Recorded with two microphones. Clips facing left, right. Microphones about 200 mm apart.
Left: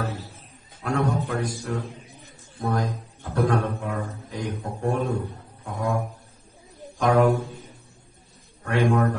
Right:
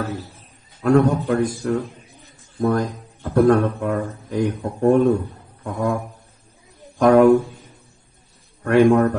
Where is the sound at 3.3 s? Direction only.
50° right (ahead or behind).